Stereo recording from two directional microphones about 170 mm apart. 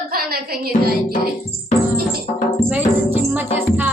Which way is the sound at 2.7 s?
10° right (ahead or behind).